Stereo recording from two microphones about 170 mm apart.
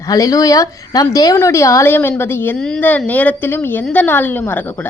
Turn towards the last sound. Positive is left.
turn(degrees=10)  # may be behind; listen again after turning